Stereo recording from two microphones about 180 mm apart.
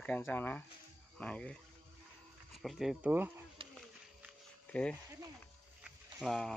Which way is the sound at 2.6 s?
Centre (ahead or behind).